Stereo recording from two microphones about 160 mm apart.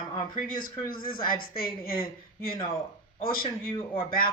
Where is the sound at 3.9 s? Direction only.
65° left (ahead or behind).